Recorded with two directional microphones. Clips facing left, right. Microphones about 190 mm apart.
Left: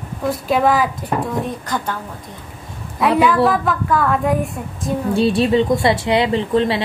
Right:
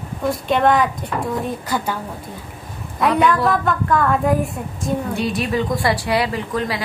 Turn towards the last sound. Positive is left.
turn(degrees=25)  # may be behind; listen again after turning